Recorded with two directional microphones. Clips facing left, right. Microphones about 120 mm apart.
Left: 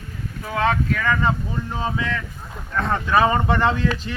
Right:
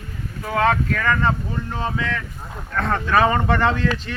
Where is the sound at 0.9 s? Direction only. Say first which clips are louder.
Right 1 dB; 10° left (ahead or behind).